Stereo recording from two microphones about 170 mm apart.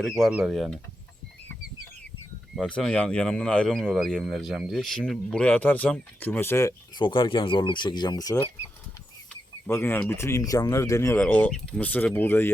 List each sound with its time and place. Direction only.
0.2 s speech: 5° right (ahead or behind)
2.6 s speech: 5° left (ahead or behind)
7.0 s speech: 30° left (ahead or behind); by 12.5 s 10° left (ahead or behind)